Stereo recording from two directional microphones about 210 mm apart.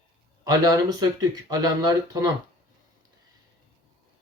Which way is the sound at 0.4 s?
15° right (ahead or behind).